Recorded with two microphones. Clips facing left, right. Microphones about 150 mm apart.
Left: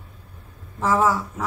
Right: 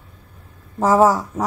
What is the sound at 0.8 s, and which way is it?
Speech, 40° right (ahead or behind).